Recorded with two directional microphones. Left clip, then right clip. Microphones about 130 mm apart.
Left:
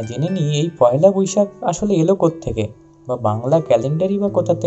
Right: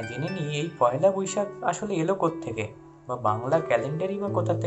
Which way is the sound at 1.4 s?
15° left (ahead or behind).